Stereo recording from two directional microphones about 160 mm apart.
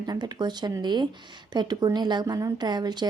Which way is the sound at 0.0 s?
25° right (ahead or behind).